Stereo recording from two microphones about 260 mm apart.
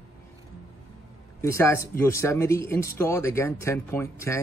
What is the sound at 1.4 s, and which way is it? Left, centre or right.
Speech, centre.